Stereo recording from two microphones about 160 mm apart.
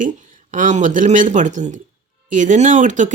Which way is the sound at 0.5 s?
50° right (ahead or behind).